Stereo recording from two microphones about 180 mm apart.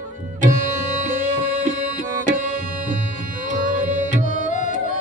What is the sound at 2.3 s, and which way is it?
Tabla, 45° right (ahead or behind).